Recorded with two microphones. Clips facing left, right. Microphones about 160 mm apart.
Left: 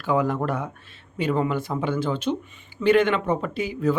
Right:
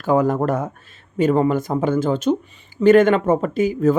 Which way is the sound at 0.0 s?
45° right (ahead or behind).